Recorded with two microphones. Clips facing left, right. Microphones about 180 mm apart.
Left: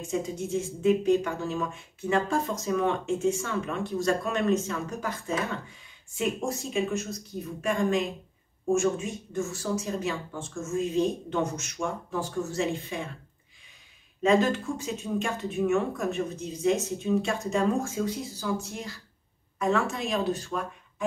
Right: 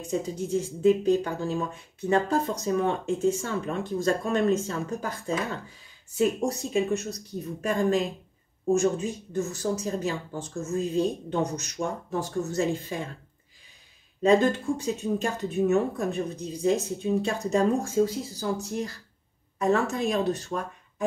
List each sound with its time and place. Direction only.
0.0 s speech: 35° right (ahead or behind)
6.1 s speech: 35° right (ahead or behind)
14.2 s speech: 35° right (ahead or behind)